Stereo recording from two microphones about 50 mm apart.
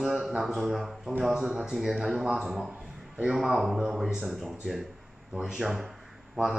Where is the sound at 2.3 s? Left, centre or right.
Centre.